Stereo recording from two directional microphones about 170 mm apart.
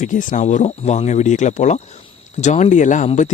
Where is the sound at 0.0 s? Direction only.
50° left (ahead or behind).